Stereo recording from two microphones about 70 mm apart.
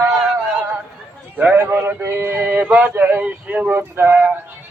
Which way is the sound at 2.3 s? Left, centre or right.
Right.